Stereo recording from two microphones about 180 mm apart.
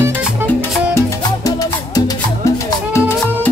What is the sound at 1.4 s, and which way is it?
Music, 20° left (ahead or behind).